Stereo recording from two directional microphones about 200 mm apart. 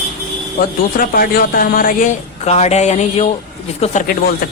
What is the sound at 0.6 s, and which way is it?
Speech, 45° left (ahead or behind).